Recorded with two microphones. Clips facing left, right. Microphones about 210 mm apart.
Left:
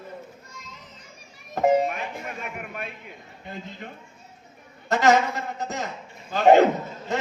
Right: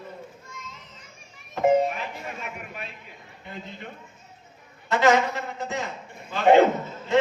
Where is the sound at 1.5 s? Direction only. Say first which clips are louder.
Even; 50° left (ahead or behind).